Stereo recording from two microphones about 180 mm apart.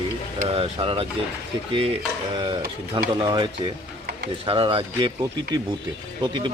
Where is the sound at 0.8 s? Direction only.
30° right (ahead or behind).